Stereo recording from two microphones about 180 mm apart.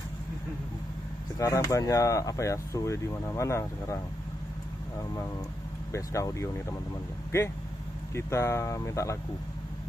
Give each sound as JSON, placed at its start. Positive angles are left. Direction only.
{"t": 1.4, "sound": "speech", "side_deg": 15}
{"t": 5.9, "sound": "speech", "side_deg": 15}
{"t": 8.1, "sound": "speech", "side_deg": 15}